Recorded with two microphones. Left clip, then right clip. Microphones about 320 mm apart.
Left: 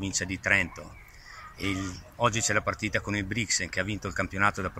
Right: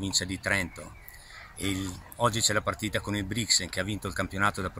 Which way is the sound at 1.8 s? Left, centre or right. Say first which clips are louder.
Even; centre.